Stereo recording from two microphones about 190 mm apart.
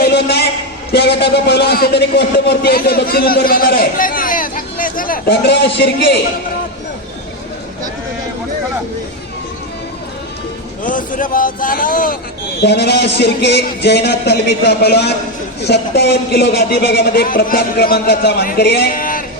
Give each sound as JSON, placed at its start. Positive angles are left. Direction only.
{"t": 0.0, "sound": "a sound", "side_deg": 60}
{"t": 0.9, "sound": "a man's voice", "side_deg": 60}
{"t": 10.8, "sound": "a man's voice", "side_deg": 45}
{"t": 12.5, "sound": "speech", "side_deg": 60}